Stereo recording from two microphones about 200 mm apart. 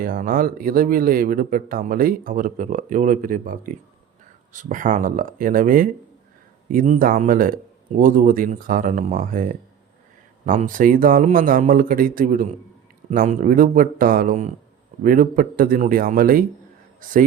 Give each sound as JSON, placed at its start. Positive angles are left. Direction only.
{"t": 0.0, "sound": "speech", "side_deg": -45}